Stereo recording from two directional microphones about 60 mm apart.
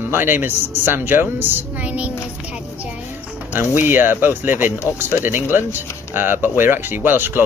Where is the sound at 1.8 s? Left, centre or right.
Right.